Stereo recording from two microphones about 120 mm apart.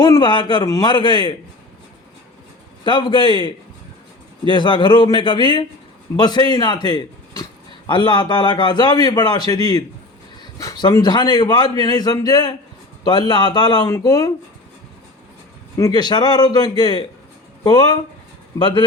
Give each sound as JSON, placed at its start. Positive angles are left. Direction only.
{"t": 0.0, "sound": "a man's voice", "side_deg": 35}
{"t": 2.8, "sound": "a man's voice", "side_deg": 40}
{"t": 16.0, "sound": "a man's voice", "side_deg": 35}